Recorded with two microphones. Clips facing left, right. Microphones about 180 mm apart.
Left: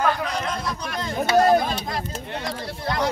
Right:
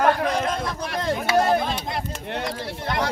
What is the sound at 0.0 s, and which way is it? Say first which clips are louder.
Chatter: right 3 dB; 50° right (ahead or behind).